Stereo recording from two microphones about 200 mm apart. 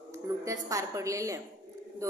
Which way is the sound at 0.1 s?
15° right (ahead or behind).